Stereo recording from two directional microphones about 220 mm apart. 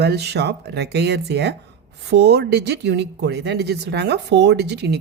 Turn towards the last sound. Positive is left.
turn(degrees=-50)  # may be behind; listen again after turning